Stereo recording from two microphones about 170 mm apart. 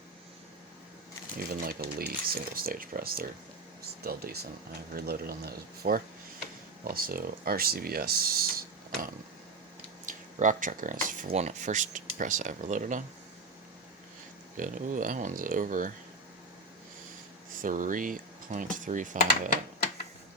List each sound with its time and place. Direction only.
1.4 s speech: 60° right (ahead or behind)
14.5 s speech: 50° right (ahead or behind)
17.6 s speech: 50° right (ahead or behind)